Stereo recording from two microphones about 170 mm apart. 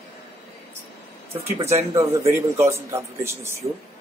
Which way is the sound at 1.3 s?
15° right (ahead or behind).